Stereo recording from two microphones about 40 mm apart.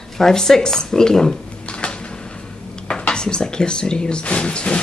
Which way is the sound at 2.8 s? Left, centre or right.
Centre.